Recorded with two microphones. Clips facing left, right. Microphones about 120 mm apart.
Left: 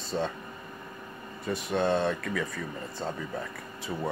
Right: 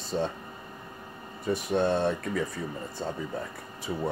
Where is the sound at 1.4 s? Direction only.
45° right (ahead or behind).